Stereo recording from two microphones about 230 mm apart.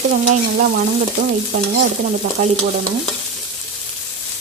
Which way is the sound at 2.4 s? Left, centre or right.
Right.